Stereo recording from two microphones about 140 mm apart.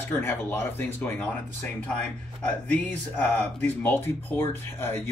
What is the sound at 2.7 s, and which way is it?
Speech, 10° left (ahead or behind).